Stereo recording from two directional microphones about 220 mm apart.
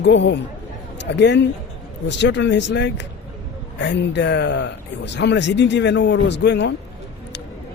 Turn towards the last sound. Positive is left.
turn(degrees=50)  # may be behind; listen again after turning